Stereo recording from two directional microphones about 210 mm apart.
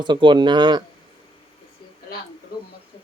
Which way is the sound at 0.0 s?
20° right (ahead or behind).